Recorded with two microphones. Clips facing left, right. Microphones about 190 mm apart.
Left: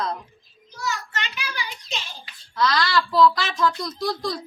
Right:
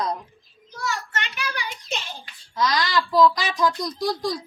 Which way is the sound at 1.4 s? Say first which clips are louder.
Right 2 dB; 55° right (ahead or behind).